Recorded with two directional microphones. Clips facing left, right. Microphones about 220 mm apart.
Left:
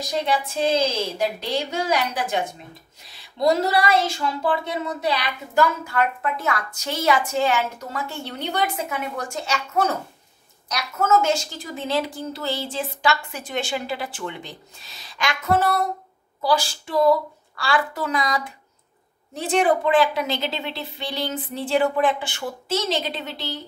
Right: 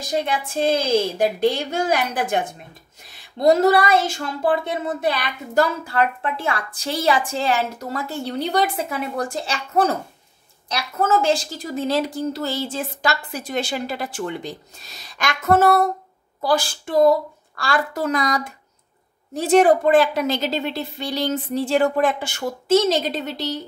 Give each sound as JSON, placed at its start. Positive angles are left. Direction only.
{"t": 1.1, "sound": "a woman's voice", "side_deg": -50}
{"t": 5.6, "sound": "a woman's voice", "side_deg": -35}